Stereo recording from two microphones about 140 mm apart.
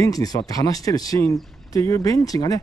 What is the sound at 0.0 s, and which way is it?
Speech, 25° left (ahead or behind).